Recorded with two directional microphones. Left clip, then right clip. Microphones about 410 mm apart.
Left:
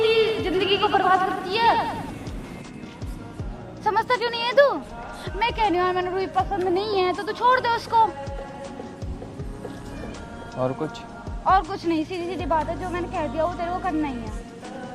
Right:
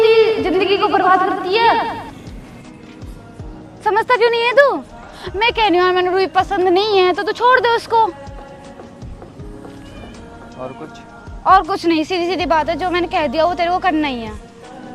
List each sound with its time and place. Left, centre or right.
0.0 s a sound: right
3.8 s speech: right
10.6 s speech: left
11.4 s a woman's voice: right